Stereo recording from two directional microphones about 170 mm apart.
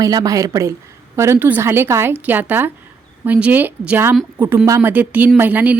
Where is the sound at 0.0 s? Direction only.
20° right (ahead or behind).